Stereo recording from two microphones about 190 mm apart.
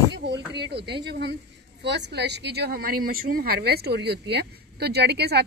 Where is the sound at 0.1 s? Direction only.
65° right (ahead or behind).